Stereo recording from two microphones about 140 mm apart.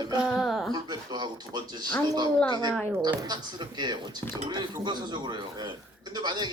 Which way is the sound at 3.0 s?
30° right (ahead or behind).